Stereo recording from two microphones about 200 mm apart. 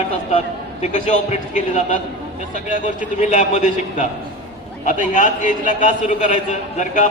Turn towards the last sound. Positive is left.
turn(degrees=35)  # may be behind; listen again after turning